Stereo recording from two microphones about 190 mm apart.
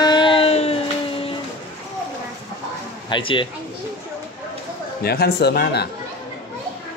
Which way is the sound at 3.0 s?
25° left (ahead or behind).